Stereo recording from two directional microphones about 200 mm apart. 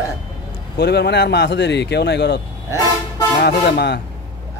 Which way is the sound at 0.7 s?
55° left (ahead or behind).